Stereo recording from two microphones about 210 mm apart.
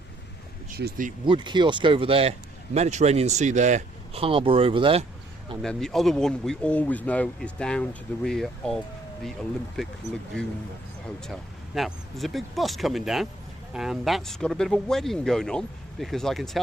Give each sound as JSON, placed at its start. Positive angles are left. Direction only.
{"t": 0.8, "sound": "speech", "side_deg": -45}
{"t": 1.2, "sound": "a man's voice", "side_deg": -20}
{"t": 5.6, "sound": "speech", "side_deg": 0}